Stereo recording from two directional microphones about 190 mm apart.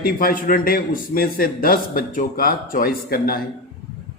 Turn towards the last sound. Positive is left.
turn(degrees=50)  # may be behind; listen again after turning